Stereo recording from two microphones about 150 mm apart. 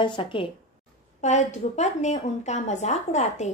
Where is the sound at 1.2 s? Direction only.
50° left (ahead or behind).